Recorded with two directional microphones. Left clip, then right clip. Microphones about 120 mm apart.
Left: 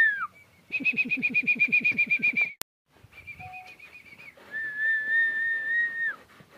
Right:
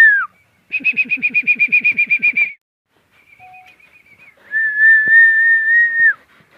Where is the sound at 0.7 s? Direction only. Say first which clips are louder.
Right 10 dB; 15° left (ahead or behind).